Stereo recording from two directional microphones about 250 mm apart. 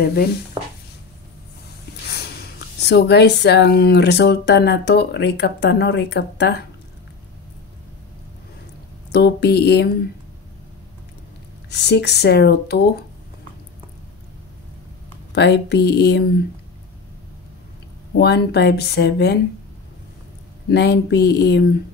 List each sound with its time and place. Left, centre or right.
0.0 s speech: left
2.0 s a sound: left
2.8 s speech: left
9.1 s speech: left
11.7 s speech: left
15.3 s speech: left
18.1 s speech: left
20.7 s speech: left